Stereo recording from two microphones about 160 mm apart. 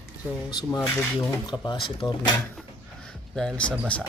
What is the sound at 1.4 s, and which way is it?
Speech, 30° left (ahead or behind).